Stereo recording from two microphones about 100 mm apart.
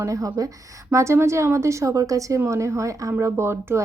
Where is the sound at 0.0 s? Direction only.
30° right (ahead or behind).